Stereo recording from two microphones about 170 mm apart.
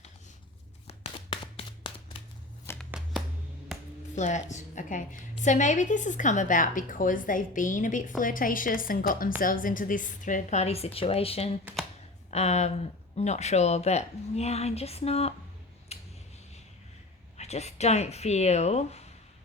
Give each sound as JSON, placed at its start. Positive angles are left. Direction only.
{"t": 0.9, "sound": "a sound", "side_deg": 35}
{"t": 2.9, "sound": "shuffling cards", "side_deg": 0}
{"t": 4.1, "sound": "a woman's voice", "side_deg": 45}
{"t": 15.9, "sound": "finger snapping", "side_deg": 40}
{"t": 17.3, "sound": "a woman's voice", "side_deg": 40}